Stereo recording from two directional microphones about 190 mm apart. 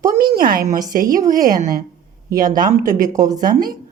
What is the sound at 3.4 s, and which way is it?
Speech, 50° right (ahead or behind).